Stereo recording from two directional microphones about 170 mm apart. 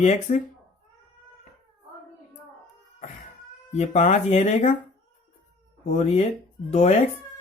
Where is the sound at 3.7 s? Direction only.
45° left (ahead or behind).